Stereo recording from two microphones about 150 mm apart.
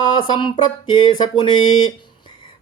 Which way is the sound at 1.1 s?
30° left (ahead or behind).